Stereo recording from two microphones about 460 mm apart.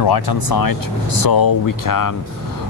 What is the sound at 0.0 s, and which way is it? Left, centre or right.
Speech, left.